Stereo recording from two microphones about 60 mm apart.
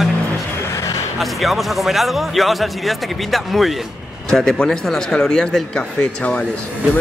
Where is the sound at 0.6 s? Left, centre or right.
Left.